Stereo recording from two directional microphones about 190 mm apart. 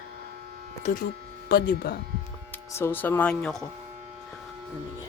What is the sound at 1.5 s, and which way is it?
Speech, 55° left (ahead or behind).